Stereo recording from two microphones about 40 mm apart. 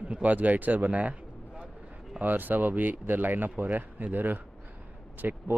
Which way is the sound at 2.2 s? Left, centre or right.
Right.